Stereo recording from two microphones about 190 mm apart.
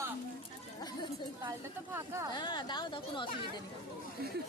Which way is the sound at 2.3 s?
25° left (ahead or behind).